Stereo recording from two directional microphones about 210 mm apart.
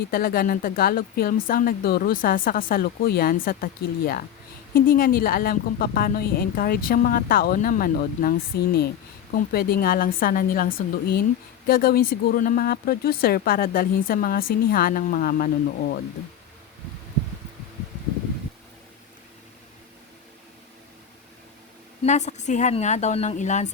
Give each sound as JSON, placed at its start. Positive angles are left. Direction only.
{"t": 0.1, "sound": "speech", "side_deg": 45}
{"t": 22.0, "sound": "a woman's voice", "side_deg": 35}